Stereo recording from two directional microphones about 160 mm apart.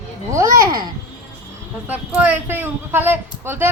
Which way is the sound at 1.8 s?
10° right (ahead or behind).